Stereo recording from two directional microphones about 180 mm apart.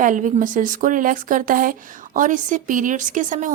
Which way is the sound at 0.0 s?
45° right (ahead or behind).